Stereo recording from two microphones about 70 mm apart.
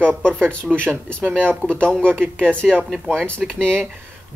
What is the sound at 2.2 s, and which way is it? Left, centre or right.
Speech, right.